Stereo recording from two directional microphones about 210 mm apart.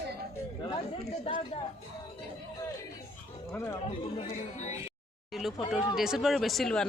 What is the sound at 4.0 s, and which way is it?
Speech, 30° left (ahead or behind).